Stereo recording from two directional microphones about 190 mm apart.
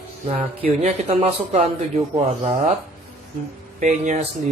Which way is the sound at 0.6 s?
35° right (ahead or behind).